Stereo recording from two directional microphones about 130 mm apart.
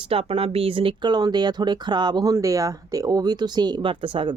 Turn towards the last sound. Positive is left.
turn(degrees=-40)  # may be behind; listen again after turning